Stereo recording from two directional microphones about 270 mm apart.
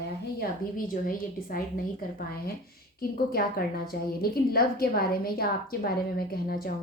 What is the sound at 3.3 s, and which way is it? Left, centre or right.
A woman's voice, left.